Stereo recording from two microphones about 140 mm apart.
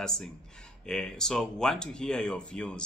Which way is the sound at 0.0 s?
5° left (ahead or behind).